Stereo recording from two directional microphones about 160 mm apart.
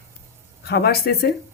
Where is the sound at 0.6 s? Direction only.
80° left.